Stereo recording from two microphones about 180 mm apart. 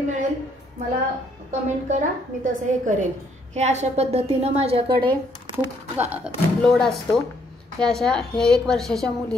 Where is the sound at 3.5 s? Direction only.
40° right (ahead or behind).